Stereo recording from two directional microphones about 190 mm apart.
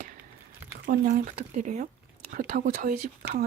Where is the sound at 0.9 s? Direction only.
40° right (ahead or behind).